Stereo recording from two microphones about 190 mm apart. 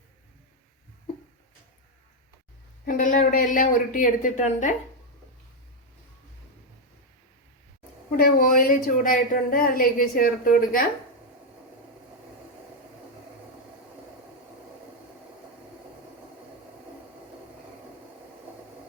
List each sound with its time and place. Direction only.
2.8 s a woman's voice: 45° left (ahead or behind)
8.1 s a woman's voice: 50° left (ahead or behind)